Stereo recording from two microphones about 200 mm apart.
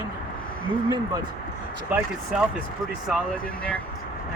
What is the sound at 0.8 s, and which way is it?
Speech, 20° right (ahead or behind).